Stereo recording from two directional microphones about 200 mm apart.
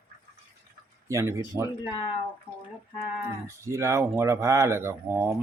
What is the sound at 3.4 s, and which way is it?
Speech, 15° right (ahead or behind).